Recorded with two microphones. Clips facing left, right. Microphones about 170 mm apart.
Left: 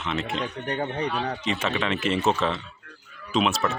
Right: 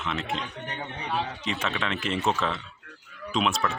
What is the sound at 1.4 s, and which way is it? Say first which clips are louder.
Speech: left 4 dB; centre (ahead or behind).